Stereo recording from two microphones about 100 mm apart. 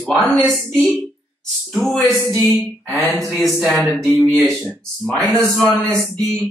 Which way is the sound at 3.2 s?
Centre (ahead or behind).